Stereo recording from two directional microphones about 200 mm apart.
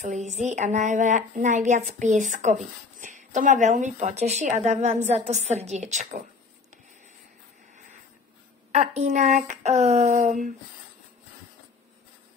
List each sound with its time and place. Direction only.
0.0 s a woman's voice: 35° right (ahead or behind)
8.7 s a woman's voice: 35° right (ahead or behind)